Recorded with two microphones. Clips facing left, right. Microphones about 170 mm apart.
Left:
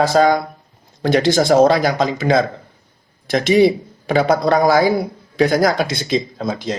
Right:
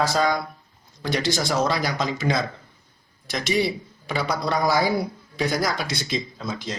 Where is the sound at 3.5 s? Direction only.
20° left (ahead or behind).